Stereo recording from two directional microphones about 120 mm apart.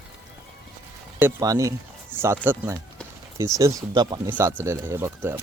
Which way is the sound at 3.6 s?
30° right (ahead or behind).